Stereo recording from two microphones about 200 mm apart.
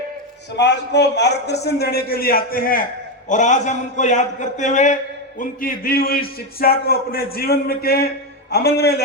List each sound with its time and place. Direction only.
0.5 s a man's voice: 60° left (ahead or behind)